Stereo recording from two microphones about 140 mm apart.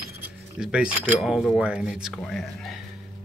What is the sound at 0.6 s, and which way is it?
Speech, 5° right (ahead or behind).